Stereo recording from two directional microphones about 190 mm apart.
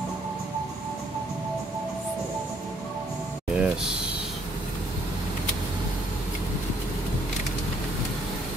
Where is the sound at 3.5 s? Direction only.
5° right (ahead or behind).